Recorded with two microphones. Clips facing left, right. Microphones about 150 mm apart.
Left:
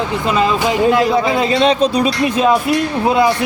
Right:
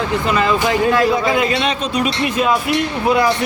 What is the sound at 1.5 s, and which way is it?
Speech, 30° left (ahead or behind).